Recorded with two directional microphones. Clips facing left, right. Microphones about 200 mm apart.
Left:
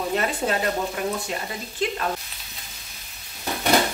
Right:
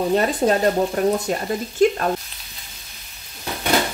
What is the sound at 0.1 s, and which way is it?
Speech, 35° right (ahead or behind).